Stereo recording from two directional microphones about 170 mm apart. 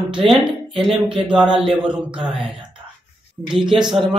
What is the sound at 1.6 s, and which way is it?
Speech, 30° right (ahead or behind).